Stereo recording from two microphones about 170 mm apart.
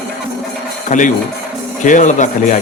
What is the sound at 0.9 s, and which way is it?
Speech, 45° left (ahead or behind).